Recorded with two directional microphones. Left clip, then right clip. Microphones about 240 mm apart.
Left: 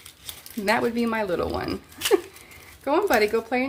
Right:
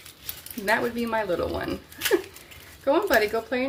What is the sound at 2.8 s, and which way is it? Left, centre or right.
Speech, left.